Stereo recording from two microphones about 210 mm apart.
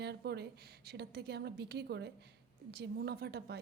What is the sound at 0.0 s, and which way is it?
A woman's voice, 50° right (ahead or behind).